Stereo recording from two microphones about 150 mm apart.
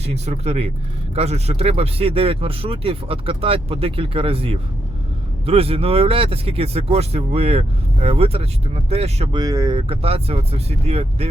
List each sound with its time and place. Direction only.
0.0 s speech: 45° right (ahead or behind)
9.3 s speech: 25° right (ahead or behind)
9.9 s speech: 40° right (ahead or behind)